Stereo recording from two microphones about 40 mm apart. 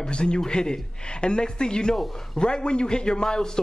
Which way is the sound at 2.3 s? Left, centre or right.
Left.